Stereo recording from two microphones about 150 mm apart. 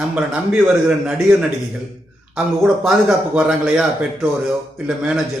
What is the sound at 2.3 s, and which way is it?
Speech, centre (ahead or behind).